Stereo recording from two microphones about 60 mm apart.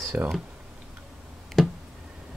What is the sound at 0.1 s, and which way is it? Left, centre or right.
Speech, right.